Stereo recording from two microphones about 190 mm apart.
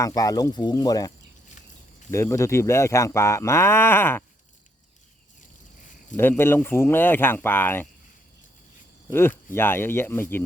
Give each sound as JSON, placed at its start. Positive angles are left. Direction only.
{"t": 0.0, "sound": "speech", "side_deg": 20}
{"t": 6.1, "sound": "speech", "side_deg": 10}
{"t": 9.0, "sound": "speech", "side_deg": 10}